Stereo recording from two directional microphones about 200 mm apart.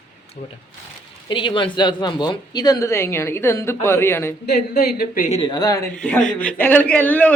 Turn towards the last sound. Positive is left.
turn(degrees=10)  # may be behind; listen again after turning